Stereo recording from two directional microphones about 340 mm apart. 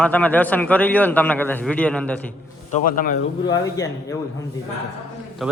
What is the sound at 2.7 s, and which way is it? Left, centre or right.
Speech, left.